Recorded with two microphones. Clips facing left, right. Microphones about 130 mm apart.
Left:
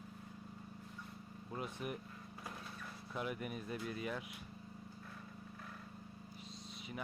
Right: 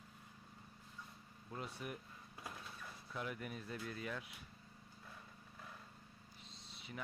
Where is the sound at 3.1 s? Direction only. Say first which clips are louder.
Left 3 dB; 15° left (ahead or behind).